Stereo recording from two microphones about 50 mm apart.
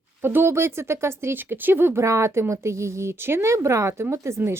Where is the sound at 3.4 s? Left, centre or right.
Right.